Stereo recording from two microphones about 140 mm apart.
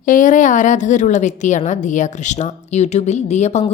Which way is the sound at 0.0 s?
70° left (ahead or behind).